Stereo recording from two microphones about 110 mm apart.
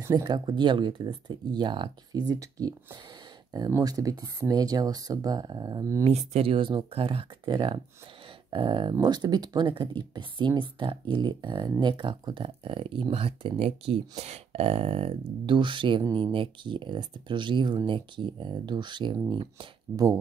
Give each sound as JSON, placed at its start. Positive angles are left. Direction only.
{"t": 0.1, "sound": "speech", "side_deg": -40}
{"t": 6.0, "sound": "speech", "side_deg": -60}
{"t": 7.4, "sound": "speech", "side_deg": -45}